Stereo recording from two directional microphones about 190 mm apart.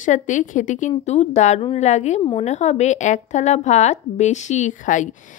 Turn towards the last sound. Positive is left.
turn(degrees=40)  # may be behind; listen again after turning